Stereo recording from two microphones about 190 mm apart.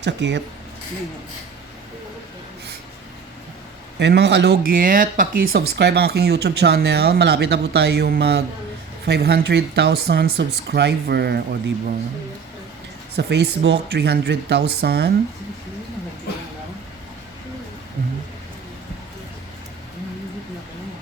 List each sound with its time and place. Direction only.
0.0 s speech: 70° right (ahead or behind)
3.9 s speech: 65° right (ahead or behind)
13.1 s speech: 60° right (ahead or behind)